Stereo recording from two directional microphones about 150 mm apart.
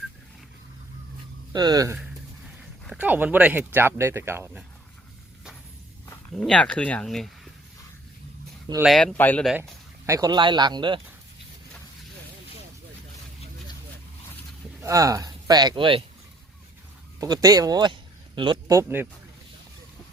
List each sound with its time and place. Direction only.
1.5 s speech: 25° right (ahead or behind)
2.8 s speech: 5° right (ahead or behind)
6.3 s speech: 5° left (ahead or behind)
8.8 s speech: centre (ahead or behind)
9.1 s speech: 10° left (ahead or behind)
10.1 s speech: 25° right (ahead or behind)
14.8 s speech: 20° right (ahead or behind)
17.2 s speech: 25° right (ahead or behind)
18.7 s speech: 15° right (ahead or behind)